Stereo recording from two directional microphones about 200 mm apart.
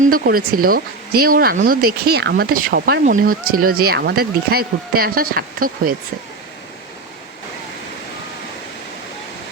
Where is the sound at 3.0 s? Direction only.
40° right (ahead or behind).